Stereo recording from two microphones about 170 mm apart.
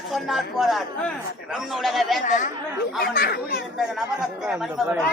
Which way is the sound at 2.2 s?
50° left (ahead or behind).